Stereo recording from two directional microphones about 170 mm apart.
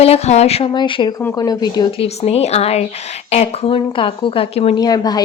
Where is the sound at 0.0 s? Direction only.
40° left (ahead or behind).